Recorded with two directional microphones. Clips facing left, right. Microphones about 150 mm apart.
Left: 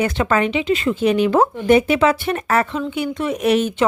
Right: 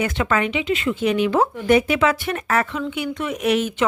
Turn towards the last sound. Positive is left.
turn(degrees=35)  # may be behind; listen again after turning